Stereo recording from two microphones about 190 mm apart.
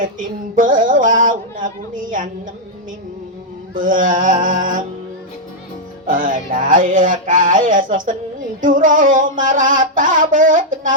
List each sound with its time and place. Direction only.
0.0 s music: 45° right (ahead or behind)
3.8 s music: 45° right (ahead or behind)
6.1 s music: 45° right (ahead or behind)